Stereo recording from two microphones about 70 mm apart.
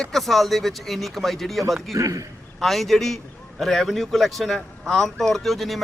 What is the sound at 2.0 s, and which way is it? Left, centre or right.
Speech, right.